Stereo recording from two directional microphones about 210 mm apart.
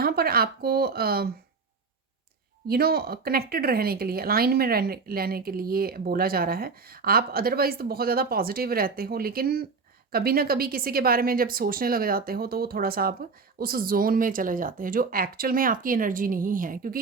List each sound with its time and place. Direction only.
0.0 s speech: 45° right (ahead or behind)
2.6 s speech: 45° right (ahead or behind)